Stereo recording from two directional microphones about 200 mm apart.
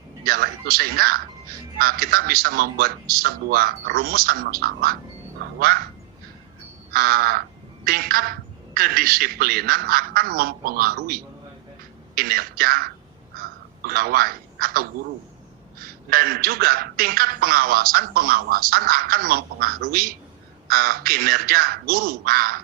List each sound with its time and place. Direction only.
0.3 s speech: 50° right (ahead or behind)
6.9 s speech: 45° right (ahead or behind)